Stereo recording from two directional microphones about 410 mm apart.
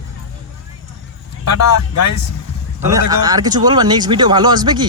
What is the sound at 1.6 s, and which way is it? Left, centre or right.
Speech, left.